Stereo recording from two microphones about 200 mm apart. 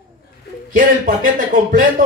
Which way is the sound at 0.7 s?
40° right (ahead or behind).